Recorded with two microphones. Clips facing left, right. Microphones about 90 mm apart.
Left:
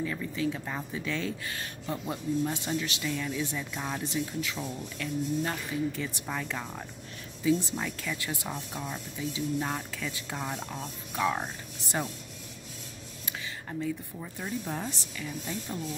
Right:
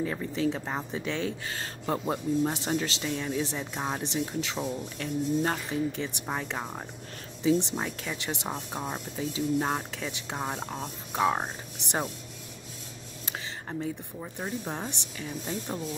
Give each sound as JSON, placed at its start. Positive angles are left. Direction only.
{"t": 0.0, "sound": "speech", "side_deg": -35}
{"t": 5.9, "sound": "speech", "side_deg": -25}
{"t": 13.2, "sound": "a sound", "side_deg": -35}
{"t": 14.2, "sound": "speech", "side_deg": -30}